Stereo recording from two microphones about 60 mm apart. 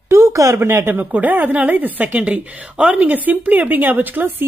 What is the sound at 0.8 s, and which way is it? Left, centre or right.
Speech, right.